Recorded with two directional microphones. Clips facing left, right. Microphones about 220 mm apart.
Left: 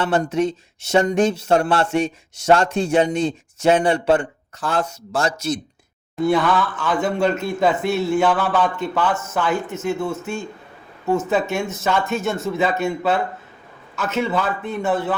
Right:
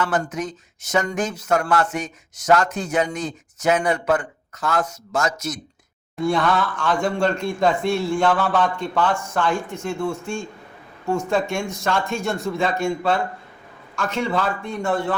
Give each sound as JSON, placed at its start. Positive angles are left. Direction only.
{"t": 0.0, "sound": "speech", "side_deg": 30}
{"t": 6.1, "sound": "speech", "side_deg": 5}